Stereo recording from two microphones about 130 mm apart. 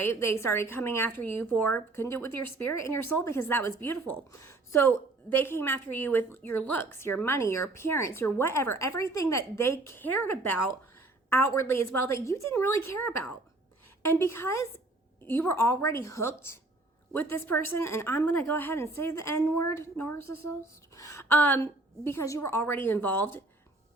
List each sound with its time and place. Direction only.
0.0 s a woman's voice: 20° left (ahead or behind)